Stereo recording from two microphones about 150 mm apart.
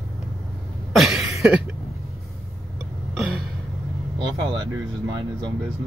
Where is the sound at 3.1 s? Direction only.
Centre (ahead or behind).